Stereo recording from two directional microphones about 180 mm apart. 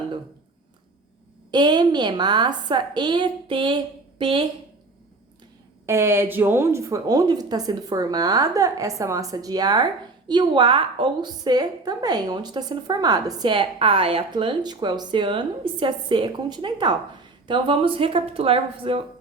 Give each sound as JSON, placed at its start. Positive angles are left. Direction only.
{"t": 1.5, "sound": "a woman's voice", "side_deg": -25}
{"t": 5.8, "sound": "a woman's voice", "side_deg": -15}